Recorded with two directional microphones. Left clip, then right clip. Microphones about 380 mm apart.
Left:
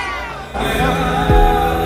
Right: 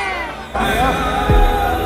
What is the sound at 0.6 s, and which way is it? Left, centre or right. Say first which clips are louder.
Music: right 1 dB; centre.